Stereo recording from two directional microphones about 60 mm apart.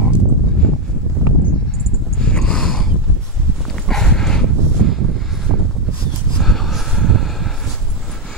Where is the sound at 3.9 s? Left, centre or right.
Centre.